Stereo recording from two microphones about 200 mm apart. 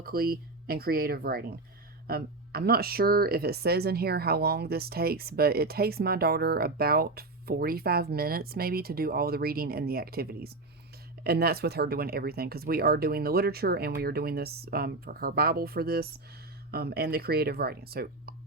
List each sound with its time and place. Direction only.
0.0 s speech: 50° right (ahead or behind)